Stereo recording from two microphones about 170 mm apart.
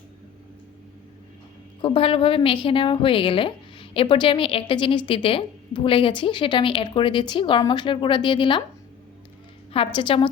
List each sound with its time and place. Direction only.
1.8 s a woman's voice: 30° left (ahead or behind)
9.7 s a woman's voice: 30° left (ahead or behind)